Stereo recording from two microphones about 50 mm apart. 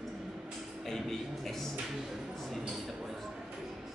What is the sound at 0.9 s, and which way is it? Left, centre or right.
Speech, centre.